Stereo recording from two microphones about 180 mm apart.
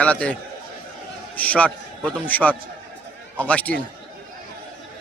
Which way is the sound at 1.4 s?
10° left (ahead or behind).